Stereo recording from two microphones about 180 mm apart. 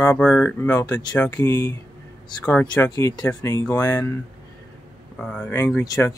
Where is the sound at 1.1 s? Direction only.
20° left (ahead or behind).